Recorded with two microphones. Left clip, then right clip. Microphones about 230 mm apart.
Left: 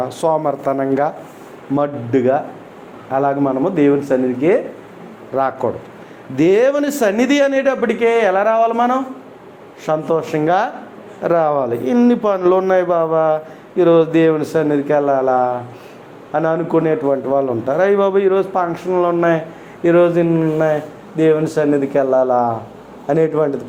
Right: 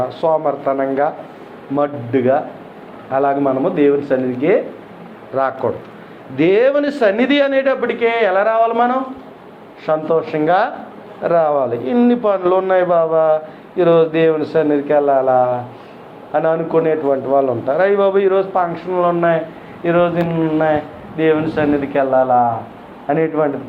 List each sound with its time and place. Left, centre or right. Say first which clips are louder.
0.0 s a man's voice: right 1 dB; left
23.0 s a man's voice: left 1 dB; left